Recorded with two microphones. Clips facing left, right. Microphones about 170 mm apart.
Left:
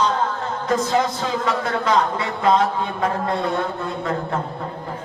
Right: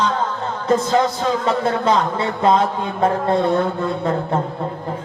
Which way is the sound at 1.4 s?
30° right (ahead or behind).